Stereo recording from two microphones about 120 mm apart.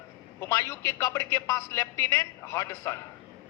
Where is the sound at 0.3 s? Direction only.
25° left (ahead or behind).